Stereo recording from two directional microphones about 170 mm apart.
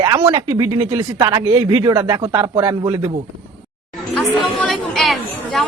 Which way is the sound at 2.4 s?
25° right (ahead or behind).